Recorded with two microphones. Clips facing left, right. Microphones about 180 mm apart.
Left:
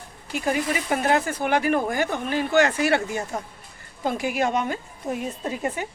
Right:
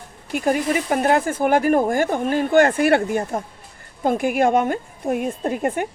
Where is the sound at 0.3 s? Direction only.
50° right (ahead or behind).